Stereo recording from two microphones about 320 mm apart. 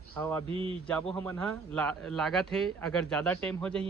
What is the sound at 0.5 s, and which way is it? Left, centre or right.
Speech, centre.